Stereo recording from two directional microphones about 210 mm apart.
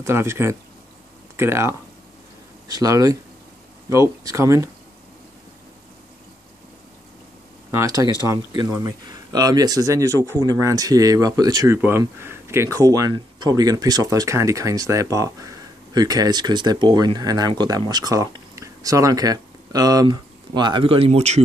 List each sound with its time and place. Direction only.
0.0 s speech: 10° right (ahead or behind)
7.7 s speech: 15° right (ahead or behind)